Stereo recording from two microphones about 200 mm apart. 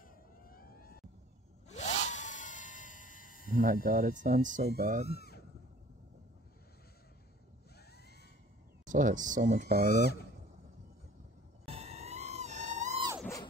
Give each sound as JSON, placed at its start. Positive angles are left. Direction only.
{"t": 0.0, "sound": "vehicle", "side_deg": 45}
{"t": 1.7, "sound": "a sound", "side_deg": 35}
{"t": 3.5, "sound": "speech", "side_deg": -45}
{"t": 5.0, "sound": "speech", "side_deg": 50}
{"t": 8.8, "sound": "speech", "side_deg": -40}
{"t": 11.6, "sound": "music", "side_deg": -30}